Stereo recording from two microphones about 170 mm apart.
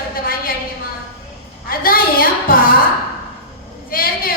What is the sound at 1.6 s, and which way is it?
A woman's voice, 60° left (ahead or behind).